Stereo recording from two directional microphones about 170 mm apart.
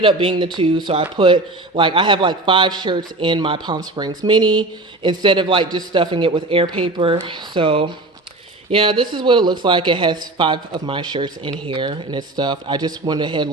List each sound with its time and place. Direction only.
0.0 s a man's voice: 30° right (ahead or behind)